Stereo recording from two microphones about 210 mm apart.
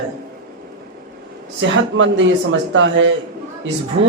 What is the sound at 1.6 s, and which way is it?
A man's voice, 65° right (ahead or behind).